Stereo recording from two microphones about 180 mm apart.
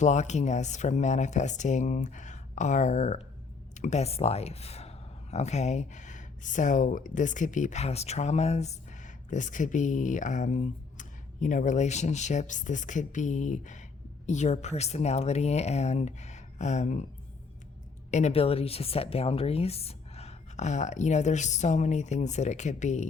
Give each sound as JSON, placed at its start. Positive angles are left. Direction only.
{"t": 0.0, "sound": "a woman's voice", "side_deg": 40}
{"t": 18.1, "sound": "a woman's voice", "side_deg": 35}